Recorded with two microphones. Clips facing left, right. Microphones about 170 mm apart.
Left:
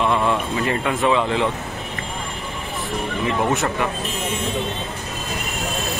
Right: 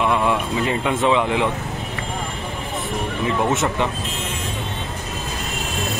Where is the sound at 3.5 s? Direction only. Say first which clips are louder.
Right 1 dB; 20° right (ahead or behind).